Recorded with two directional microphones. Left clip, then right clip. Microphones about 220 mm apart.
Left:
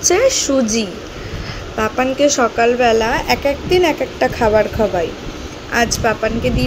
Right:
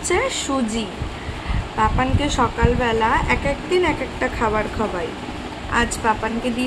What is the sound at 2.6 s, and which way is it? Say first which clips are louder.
A woman's voice: left 9 dB; 10° left (ahead or behind).